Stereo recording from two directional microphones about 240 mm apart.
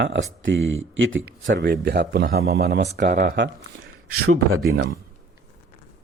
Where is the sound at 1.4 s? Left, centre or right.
Right.